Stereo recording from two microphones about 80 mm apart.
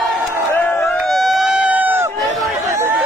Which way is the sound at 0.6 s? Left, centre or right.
Left.